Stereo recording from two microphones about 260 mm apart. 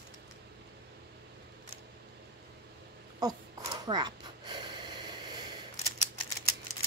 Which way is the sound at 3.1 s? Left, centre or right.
Centre.